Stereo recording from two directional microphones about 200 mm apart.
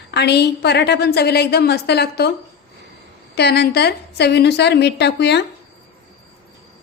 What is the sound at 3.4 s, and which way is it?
A woman's voice, 55° left (ahead or behind).